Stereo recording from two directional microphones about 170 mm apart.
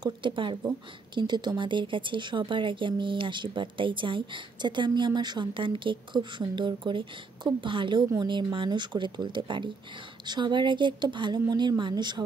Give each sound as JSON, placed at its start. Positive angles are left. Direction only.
{"t": 0.0, "sound": "speech", "side_deg": -30}